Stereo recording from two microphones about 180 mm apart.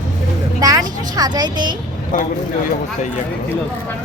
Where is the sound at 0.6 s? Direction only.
20° right (ahead or behind).